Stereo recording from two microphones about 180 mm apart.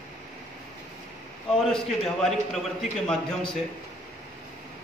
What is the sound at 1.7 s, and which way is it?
A man's voice, centre (ahead or behind).